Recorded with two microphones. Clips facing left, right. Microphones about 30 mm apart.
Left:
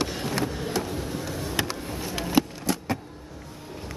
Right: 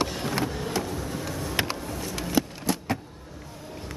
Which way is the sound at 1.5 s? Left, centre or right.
Right.